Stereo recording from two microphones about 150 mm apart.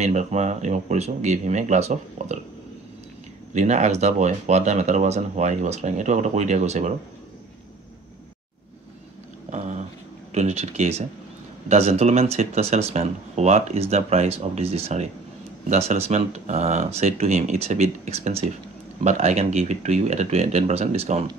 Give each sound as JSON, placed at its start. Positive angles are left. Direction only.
{"t": 0.0, "sound": "speech", "side_deg": -50}
{"t": 3.5, "sound": "speech", "side_deg": -50}
{"t": 9.5, "sound": "a sound", "side_deg": -55}
{"t": 10.3, "sound": "speech", "side_deg": -45}